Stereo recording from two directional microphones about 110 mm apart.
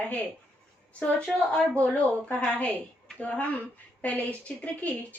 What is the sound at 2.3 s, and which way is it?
A woman's voice, 10° left (ahead or behind).